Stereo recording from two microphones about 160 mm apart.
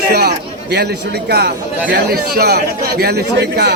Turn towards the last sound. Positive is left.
turn(degrees=-90)